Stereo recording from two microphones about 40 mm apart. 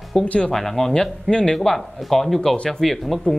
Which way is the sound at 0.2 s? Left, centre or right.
Left.